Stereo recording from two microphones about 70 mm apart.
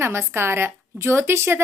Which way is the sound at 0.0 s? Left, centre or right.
Right.